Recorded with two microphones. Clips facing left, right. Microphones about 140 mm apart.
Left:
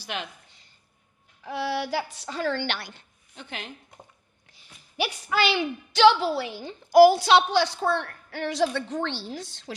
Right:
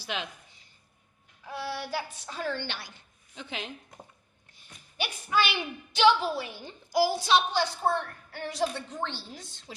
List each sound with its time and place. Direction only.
1.5 s a woman's voice: 90° left; by 3.0 s 70° left (ahead or behind)
3.3 s a woman's voice: centre (ahead or behind)
4.5 s a woman's voice: 90° left